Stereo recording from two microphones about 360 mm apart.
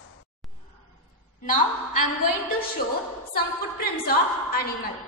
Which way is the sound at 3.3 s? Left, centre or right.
Left.